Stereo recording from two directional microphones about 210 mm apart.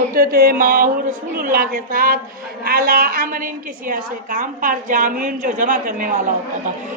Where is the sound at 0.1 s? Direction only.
45° right (ahead or behind).